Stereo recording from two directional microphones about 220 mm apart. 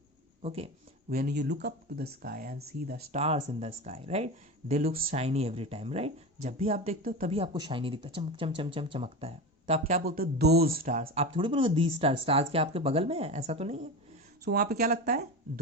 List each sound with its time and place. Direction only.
0.4 s speech: 25° right (ahead or behind)
1.1 s speech: 45° right (ahead or behind)
3.2 s speech: 30° right (ahead or behind)
4.7 s speech: 40° right (ahead or behind)
5.1 s speech: 30° right (ahead or behind)
7.0 s speech: 40° right (ahead or behind)
7.3 s speech: 25° right (ahead or behind)
10.0 s speech: 45° right (ahead or behind); by 13.8 s 30° right (ahead or behind)
14.4 s speech: 45° right (ahead or behind)